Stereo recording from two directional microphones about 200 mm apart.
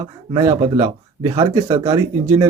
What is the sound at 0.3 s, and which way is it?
Speech, 20° right (ahead or behind).